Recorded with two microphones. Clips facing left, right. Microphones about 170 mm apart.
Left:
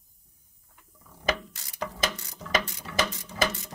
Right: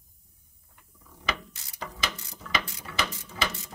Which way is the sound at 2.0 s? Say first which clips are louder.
Left 3 dB; 45° left (ahead or behind).